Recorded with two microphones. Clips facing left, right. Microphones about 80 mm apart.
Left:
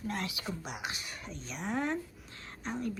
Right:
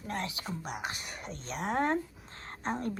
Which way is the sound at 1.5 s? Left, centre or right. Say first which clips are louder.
Right 4 dB; right.